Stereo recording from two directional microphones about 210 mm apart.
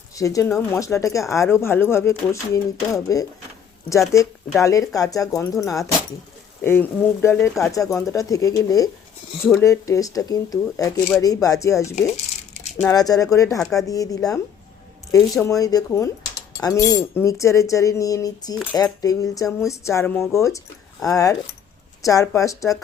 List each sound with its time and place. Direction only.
0.1 s speech: 15° left (ahead or behind)
15.4 s speech: 15° left (ahead or behind)